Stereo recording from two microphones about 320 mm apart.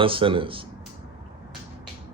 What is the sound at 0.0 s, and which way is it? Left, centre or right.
Speech, centre.